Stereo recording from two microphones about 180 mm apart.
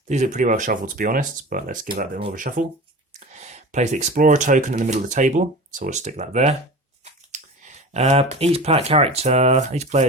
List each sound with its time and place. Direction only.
0.1 s speech: 40° right (ahead or behind)